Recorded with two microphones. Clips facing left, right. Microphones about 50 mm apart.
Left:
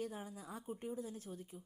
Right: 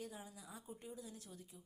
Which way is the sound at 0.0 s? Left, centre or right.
Left.